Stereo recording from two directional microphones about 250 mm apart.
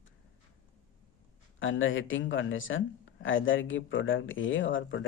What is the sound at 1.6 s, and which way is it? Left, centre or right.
Speech, left.